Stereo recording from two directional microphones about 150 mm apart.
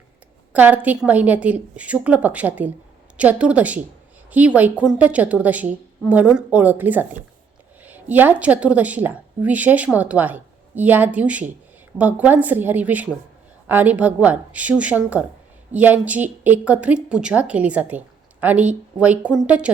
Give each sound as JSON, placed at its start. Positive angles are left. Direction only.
{"t": 0.5, "sound": "a woman's voice", "side_deg": -10}